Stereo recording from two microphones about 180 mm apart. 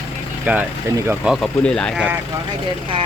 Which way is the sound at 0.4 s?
10° right (ahead or behind).